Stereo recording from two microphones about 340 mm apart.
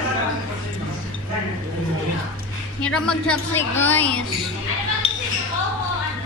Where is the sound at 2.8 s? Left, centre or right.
Centre.